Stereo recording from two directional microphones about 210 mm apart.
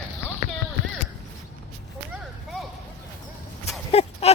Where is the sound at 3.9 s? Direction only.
30° left (ahead or behind).